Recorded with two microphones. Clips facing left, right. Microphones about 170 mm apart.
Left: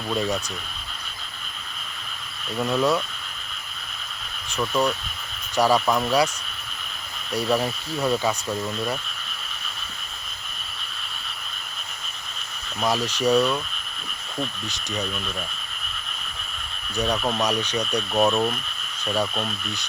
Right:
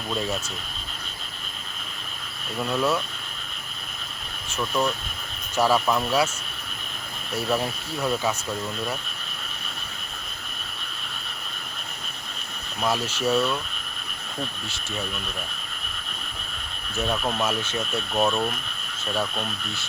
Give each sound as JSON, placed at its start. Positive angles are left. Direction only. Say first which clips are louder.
{"t": 0.1, "sound": "speech", "louder": "left 3 dB", "side_deg": 0}
{"t": 2.6, "sound": "speech", "louder": "left 3 dB", "side_deg": 5}
{"t": 4.6, "sound": "speech", "louder": "left 2 dB", "side_deg": 10}
{"t": 7.6, "sound": "speech", "louder": "left 2 dB", "side_deg": 0}
{"t": 13.2, "sound": "speech", "louder": "left 3 dB", "side_deg": 15}
{"t": 17.0, "sound": "speech", "louder": "left 2 dB", "side_deg": 0}
{"t": 19.1, "sound": "speech", "louder": "left 2 dB", "side_deg": 15}